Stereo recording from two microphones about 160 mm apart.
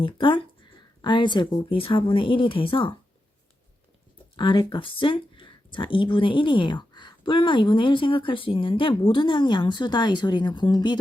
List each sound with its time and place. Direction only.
0.0 s speech: 30° left (ahead or behind)
4.4 s speech: 30° left (ahead or behind)